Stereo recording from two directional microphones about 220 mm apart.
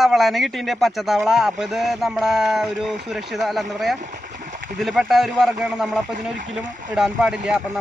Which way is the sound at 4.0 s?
35° right (ahead or behind).